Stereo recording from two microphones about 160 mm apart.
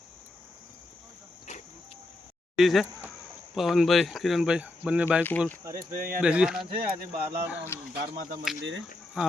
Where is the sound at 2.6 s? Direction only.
Centre (ahead or behind).